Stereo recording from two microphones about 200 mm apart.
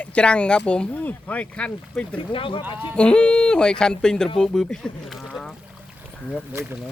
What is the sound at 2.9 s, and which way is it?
Speech, 5° left (ahead or behind).